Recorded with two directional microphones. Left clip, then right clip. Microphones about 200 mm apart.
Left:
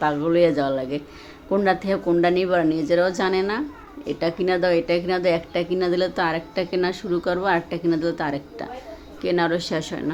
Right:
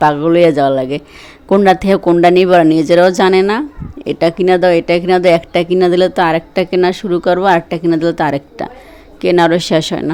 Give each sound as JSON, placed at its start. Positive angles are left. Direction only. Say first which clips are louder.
{"t": 0.0, "sound": "speech", "louder": "right 10 dB", "side_deg": -40}